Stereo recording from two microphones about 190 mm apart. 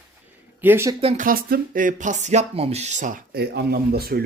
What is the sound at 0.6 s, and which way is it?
Speech, 10° right (ahead or behind).